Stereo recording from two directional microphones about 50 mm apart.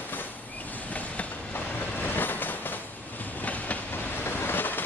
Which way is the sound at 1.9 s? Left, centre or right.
Left.